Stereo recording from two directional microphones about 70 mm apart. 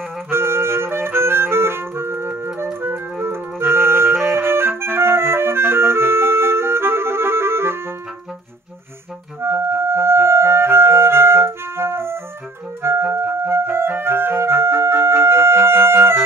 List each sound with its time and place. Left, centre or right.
0.3 s clarinet: right
9.4 s music: right